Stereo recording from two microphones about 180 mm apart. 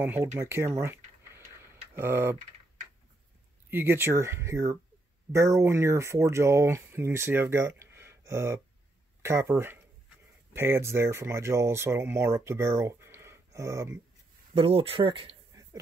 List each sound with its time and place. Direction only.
0.0 s speech: 10° right (ahead or behind)
0.4 s tick-tock: 15° right (ahead or behind)
3.7 s speech: 10° right (ahead or behind)
14.5 s speech: 30° right (ahead or behind)